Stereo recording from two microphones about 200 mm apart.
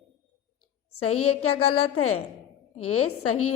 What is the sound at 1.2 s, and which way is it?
A woman's voice, 90° left.